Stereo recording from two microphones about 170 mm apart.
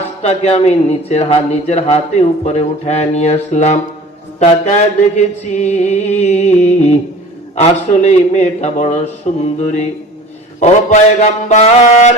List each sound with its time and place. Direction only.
0.2 s speech: 40° left (ahead or behind)
4.4 s mantra: 40° left (ahead or behind)
5.1 s speech: 40° left (ahead or behind)
10.6 s a sound: 45° left (ahead or behind)